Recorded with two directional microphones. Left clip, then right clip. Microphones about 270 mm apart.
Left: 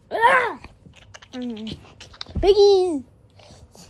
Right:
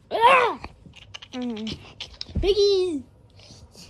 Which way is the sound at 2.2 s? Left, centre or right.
Centre.